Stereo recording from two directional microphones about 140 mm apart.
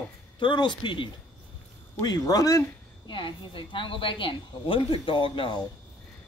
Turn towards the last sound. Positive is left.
turn(degrees=35)  # may be behind; listen again after turning